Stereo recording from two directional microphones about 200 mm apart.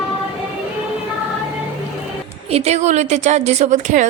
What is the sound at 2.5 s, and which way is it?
A woman's voice, 35° right (ahead or behind).